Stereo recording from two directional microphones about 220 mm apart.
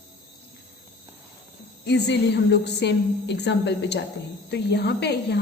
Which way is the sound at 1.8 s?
50° left (ahead or behind).